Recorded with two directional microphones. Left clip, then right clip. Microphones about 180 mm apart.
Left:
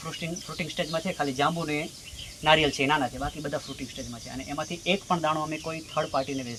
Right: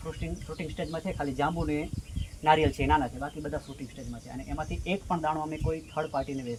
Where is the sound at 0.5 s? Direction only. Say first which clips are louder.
Left 5 dB; 25° left (ahead or behind).